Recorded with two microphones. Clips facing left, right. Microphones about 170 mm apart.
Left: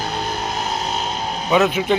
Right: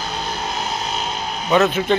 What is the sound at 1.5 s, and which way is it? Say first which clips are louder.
Speech: even; 10° left (ahead or behind).